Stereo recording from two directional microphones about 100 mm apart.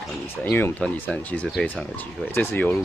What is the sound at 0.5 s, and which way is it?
Speech, 20° left (ahead or behind).